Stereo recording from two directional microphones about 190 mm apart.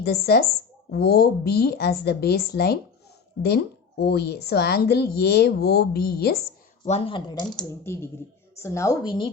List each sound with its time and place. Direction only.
0.0 s a woman's voice: 55° left (ahead or behind)
6.8 s speech: 30° left (ahead or behind)
7.7 s a woman's voice: 15° left (ahead or behind)